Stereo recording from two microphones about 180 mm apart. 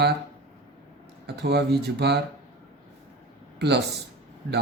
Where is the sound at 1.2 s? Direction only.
65° right (ahead or behind).